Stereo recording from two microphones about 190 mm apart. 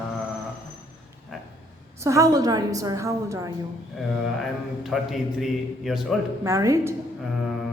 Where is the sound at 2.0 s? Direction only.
15° right (ahead or behind).